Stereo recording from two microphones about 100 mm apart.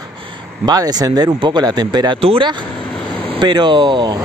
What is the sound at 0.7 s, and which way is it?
Speech, 40° right (ahead or behind).